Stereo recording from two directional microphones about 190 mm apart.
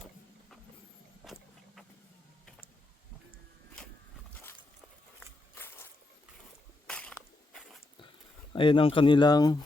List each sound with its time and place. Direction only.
1.2 s vehicle: centre (ahead or behind)
5.5 s a sound: 10° left (ahead or behind)
8.5 s speech: 25° left (ahead or behind)